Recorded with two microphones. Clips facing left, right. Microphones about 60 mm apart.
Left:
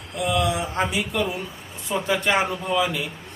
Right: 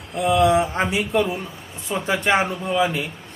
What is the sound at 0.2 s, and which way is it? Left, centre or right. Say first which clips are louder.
Speech: right 6 dB; right.